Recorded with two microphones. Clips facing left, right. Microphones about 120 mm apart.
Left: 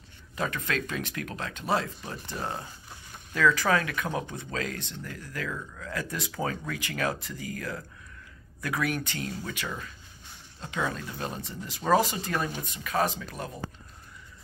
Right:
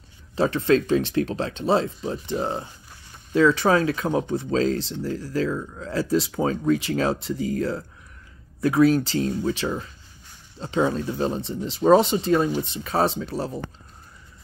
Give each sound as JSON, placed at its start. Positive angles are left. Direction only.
{"t": 0.4, "sound": "speech", "side_deg": -30}